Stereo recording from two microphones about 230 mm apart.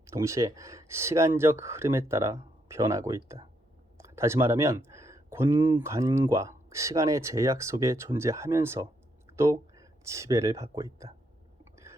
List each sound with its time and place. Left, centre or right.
0.0 s speech: centre